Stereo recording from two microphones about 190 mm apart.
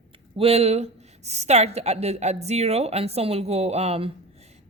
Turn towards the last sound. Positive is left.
turn(degrees=-30)  # may be behind; listen again after turning